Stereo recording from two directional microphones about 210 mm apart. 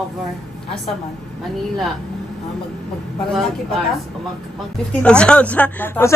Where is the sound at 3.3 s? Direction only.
Centre (ahead or behind).